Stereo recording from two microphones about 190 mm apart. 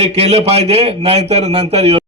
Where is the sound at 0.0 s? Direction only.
35° right (ahead or behind).